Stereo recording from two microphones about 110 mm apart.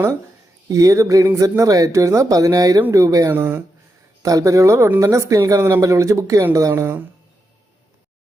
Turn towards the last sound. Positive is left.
turn(degrees=-20)  # may be behind; listen again after turning